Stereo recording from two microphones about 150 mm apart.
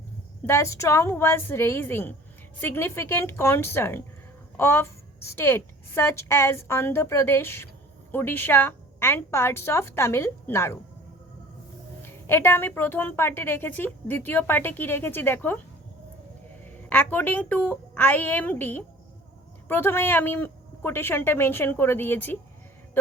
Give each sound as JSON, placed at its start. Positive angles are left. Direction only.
{"t": 0.4, "sound": "a woman's voice", "side_deg": 20}
{"t": 12.0, "sound": "a woman's voice", "side_deg": 15}
{"t": 16.6, "sound": "a woman's voice", "side_deg": 10}